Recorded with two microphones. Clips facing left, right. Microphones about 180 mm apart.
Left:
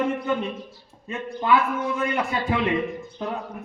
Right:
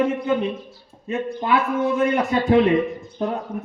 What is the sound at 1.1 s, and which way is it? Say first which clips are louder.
A man's voice: right 1 dB; 25° right (ahead or behind).